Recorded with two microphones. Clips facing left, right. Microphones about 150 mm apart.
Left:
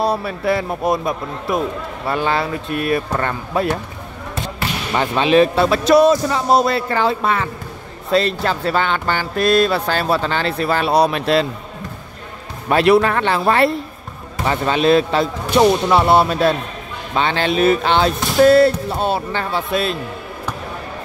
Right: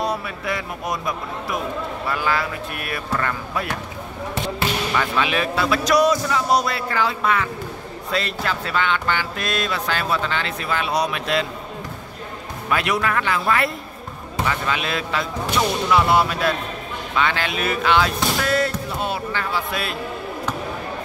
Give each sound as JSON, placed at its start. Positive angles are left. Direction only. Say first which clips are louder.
{"t": 0.0, "sound": "speech", "louder": "left 6 dB", "side_deg": 30}
{"t": 4.9, "sound": "speech", "louder": "left 11 dB", "side_deg": 30}
{"t": 12.6, "sound": "speech", "louder": "left 9 dB", "side_deg": 35}